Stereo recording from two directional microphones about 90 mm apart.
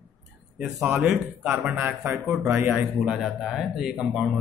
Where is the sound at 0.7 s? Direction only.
5° right (ahead or behind).